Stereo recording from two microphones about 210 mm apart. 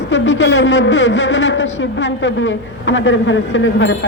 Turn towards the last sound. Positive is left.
turn(degrees=65)  # may be behind; listen again after turning